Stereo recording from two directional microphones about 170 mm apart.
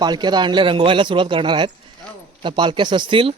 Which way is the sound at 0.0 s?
25° right (ahead or behind).